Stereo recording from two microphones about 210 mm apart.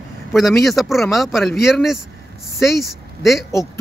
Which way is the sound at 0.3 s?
Centre (ahead or behind).